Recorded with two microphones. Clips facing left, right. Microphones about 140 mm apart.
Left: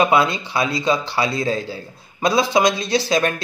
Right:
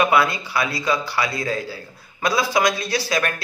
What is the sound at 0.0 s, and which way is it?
A man's voice, 20° left (ahead or behind).